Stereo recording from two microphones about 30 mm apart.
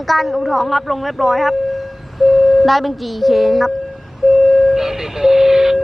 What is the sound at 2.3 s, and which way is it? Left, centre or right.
Speech, centre.